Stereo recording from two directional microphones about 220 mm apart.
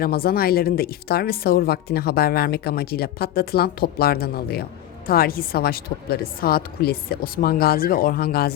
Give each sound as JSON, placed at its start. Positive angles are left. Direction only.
{"t": 0.0, "sound": "speech", "side_deg": 45}